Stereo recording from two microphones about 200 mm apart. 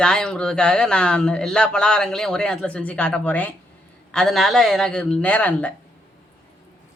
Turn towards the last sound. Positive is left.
turn(degrees=10)  # may be behind; listen again after turning